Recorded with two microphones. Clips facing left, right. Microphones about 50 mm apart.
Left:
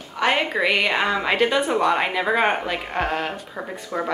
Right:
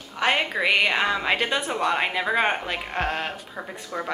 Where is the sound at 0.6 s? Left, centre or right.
Centre.